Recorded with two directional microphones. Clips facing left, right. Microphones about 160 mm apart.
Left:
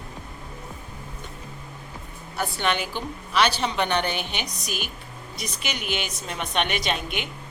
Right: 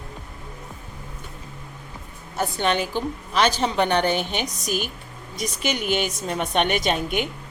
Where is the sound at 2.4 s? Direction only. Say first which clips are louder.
Right 3 dB; 40° right (ahead or behind).